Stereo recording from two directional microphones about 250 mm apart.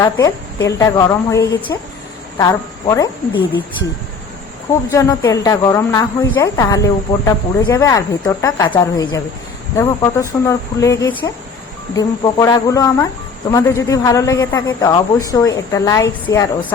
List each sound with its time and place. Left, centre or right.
0.0 s speech: centre
4.9 s speech: centre